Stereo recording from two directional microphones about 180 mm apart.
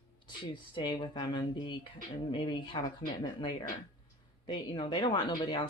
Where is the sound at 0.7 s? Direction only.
25° left (ahead or behind).